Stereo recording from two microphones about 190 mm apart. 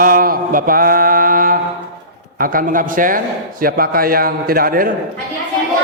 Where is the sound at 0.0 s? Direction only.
50° right (ahead or behind).